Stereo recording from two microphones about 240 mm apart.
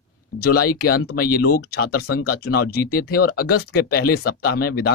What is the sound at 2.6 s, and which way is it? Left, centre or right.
Speech, left.